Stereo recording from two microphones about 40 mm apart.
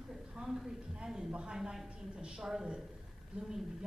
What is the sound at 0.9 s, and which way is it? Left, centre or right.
Speech, centre.